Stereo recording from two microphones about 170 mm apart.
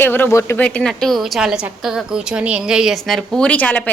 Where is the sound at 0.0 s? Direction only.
10° left (ahead or behind).